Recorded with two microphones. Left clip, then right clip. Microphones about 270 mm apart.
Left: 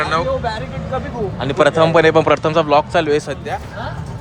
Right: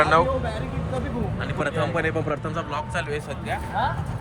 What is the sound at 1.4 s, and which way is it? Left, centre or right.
Speech, left.